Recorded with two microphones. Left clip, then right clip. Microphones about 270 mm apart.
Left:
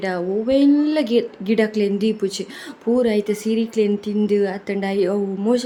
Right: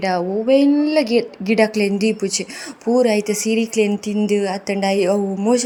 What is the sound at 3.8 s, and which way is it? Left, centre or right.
Speech, left.